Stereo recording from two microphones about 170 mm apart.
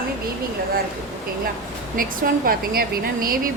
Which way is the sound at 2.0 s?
60° right (ahead or behind).